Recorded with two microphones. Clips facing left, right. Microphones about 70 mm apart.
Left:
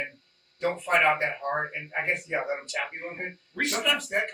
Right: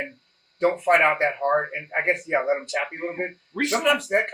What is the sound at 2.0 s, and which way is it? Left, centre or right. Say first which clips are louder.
Speech: right 8 dB; right.